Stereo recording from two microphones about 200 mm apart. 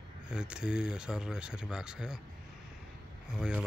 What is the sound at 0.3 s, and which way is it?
Speech, 5° right (ahead or behind).